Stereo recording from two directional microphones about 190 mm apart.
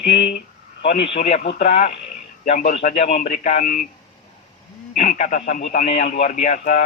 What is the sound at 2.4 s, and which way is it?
A man's voice, 40° left (ahead or behind).